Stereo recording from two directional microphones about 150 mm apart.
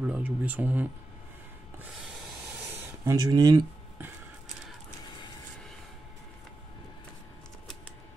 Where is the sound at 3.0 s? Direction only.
25° right (ahead or behind).